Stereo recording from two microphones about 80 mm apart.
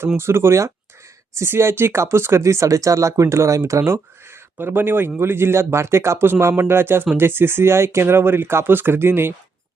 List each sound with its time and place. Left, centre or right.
0.2 s speech: right